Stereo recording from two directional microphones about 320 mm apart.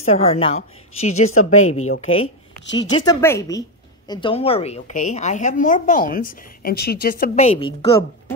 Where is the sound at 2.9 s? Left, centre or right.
Centre.